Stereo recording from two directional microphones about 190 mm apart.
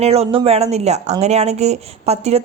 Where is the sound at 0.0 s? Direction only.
35° right (ahead or behind).